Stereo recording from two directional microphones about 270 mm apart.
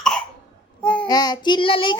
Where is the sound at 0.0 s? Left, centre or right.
Centre.